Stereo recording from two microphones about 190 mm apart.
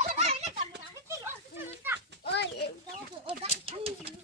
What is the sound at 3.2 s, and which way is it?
Bird, 30° right (ahead or behind).